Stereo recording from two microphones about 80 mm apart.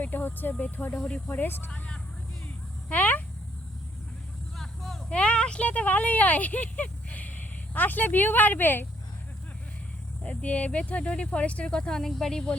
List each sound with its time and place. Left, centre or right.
0.0 s speech: left
2.9 s speech: centre
4.5 s vehicle: centre
5.1 s speech: centre
10.2 s speech: centre